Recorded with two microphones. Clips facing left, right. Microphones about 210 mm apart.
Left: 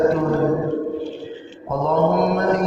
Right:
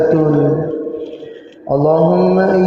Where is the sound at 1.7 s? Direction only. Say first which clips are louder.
Right 8 dB; 45° right (ahead or behind).